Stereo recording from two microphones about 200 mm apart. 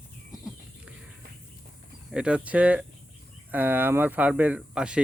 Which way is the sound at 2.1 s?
5° right (ahead or behind).